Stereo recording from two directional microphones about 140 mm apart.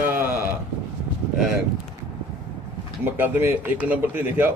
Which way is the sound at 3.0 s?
15° right (ahead or behind).